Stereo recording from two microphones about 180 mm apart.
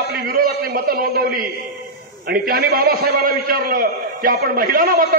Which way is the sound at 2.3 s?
55° right (ahead or behind).